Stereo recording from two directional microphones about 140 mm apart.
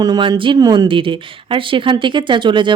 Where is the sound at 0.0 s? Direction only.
30° right (ahead or behind).